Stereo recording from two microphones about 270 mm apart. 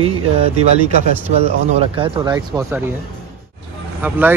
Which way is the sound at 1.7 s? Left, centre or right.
Right.